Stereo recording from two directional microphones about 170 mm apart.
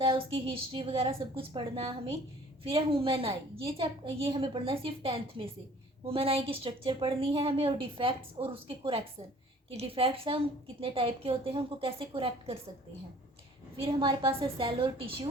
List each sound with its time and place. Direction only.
0.0 s a woman's voice: 30° right (ahead or behind)
13.8 s a woman's voice: 30° right (ahead or behind)